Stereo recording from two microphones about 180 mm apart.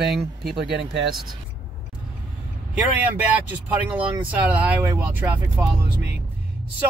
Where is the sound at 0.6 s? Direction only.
75° right (ahead or behind).